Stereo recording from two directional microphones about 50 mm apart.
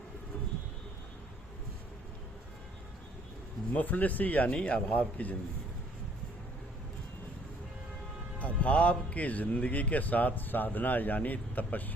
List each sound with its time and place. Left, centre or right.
3.7 s speech: left
8.4 s speech: left